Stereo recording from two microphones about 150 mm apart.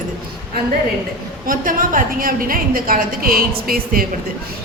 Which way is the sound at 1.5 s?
65° right (ahead or behind).